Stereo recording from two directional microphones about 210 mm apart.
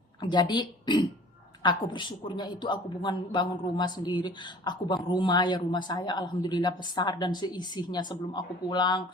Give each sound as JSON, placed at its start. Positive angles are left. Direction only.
{"t": 0.2, "sound": "a man's voice", "side_deg": 20}